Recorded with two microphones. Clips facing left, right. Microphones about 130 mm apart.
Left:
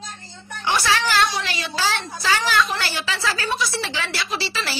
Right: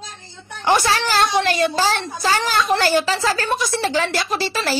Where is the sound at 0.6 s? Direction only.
45° right (ahead or behind).